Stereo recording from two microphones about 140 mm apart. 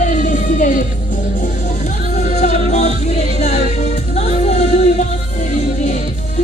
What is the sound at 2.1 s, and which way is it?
Music, 55° left (ahead or behind).